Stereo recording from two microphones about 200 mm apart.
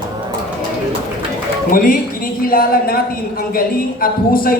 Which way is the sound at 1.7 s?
45° left (ahead or behind).